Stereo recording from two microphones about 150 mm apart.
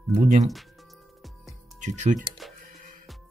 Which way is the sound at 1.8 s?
55° right (ahead or behind).